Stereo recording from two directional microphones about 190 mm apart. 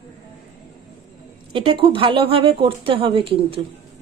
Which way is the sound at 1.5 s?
25° right (ahead or behind).